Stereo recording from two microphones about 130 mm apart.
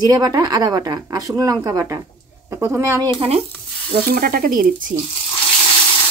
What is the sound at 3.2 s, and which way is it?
Sizzle, 50° right (ahead or behind).